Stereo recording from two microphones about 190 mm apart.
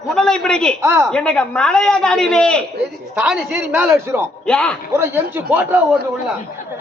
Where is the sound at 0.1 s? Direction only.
5° left (ahead or behind).